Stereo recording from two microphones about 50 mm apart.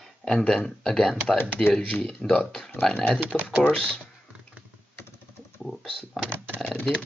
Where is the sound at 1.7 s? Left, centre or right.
Left.